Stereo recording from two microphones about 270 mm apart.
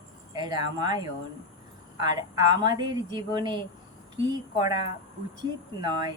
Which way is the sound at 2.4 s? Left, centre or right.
Centre.